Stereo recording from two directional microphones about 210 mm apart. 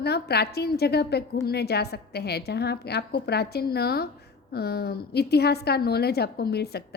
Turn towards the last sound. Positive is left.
turn(degrees=50)  # may be behind; listen again after turning